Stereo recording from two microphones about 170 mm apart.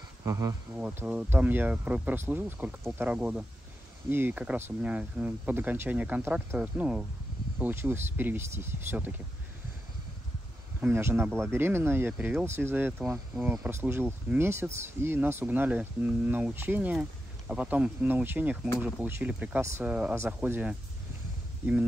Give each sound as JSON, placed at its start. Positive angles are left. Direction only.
{"t": 0.2, "sound": "speech", "side_deg": -20}
{"t": 0.7, "sound": "speech", "side_deg": -5}
{"t": 10.8, "sound": "speech", "side_deg": -15}